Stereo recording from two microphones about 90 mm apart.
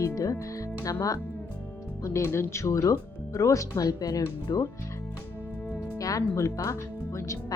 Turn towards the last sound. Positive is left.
turn(degrees=35)  # may be behind; listen again after turning